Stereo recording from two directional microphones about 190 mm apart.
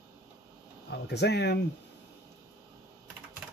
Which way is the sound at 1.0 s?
60° left (ahead or behind).